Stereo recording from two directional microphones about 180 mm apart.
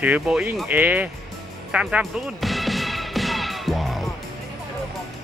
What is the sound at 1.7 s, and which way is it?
Music, 5° right (ahead or behind).